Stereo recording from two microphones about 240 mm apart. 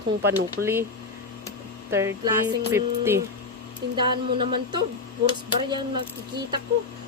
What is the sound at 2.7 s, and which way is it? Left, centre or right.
A woman's voice, centre.